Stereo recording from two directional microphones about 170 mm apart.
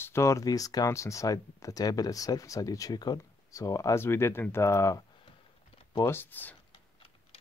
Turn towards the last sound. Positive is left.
turn(degrees=10)  # may be behind; listen again after turning